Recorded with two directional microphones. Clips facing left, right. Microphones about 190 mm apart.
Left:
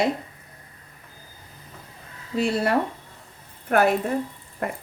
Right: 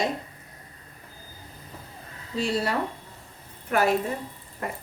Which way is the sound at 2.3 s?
55° left (ahead or behind).